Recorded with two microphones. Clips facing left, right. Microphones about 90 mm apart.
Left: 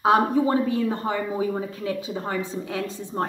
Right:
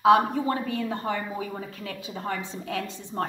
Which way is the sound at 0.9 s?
20° left (ahead or behind).